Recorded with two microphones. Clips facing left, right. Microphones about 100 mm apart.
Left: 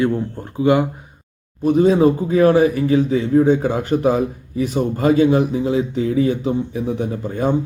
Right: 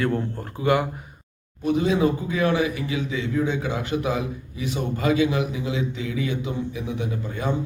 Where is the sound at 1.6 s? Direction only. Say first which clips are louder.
Left 7 dB; 40° left (ahead or behind).